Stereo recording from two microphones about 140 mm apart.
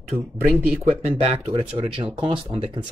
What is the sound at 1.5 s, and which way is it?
Speech, 40° right (ahead or behind).